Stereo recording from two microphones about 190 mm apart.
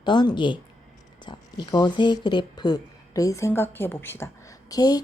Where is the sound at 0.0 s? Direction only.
25° left (ahead or behind).